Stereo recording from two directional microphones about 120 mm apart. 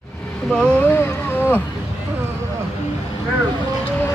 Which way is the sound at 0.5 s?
5° left (ahead or behind).